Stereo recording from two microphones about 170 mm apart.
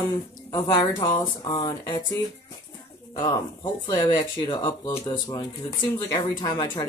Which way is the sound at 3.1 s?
20° left (ahead or behind).